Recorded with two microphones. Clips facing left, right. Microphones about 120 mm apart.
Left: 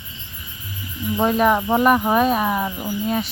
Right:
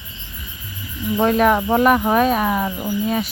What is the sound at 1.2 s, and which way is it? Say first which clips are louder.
Speech: right 2 dB; 5° left (ahead or behind).